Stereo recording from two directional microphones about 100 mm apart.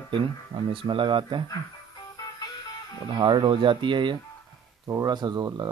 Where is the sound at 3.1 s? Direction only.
50° right (ahead or behind).